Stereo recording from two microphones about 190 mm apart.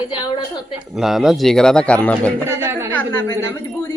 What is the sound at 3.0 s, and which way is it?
Speech, 15° left (ahead or behind).